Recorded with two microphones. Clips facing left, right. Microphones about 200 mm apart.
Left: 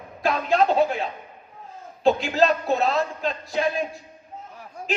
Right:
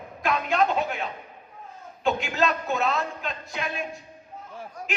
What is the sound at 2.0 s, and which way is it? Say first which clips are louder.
A man's voice: left 5 dB; 35° left (ahead or behind).